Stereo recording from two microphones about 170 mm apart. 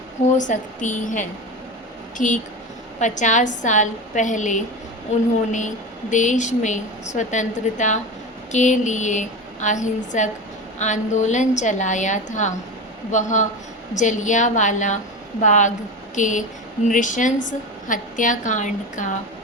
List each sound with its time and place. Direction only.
0.3 s a woman's voice: 45° left (ahead or behind)